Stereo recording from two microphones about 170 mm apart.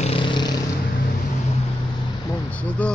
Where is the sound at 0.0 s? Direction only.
30° left (ahead or behind).